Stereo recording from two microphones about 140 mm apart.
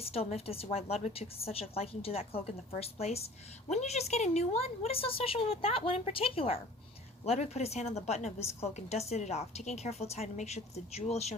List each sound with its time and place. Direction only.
0.0 s a woman's voice: 45° left (ahead or behind)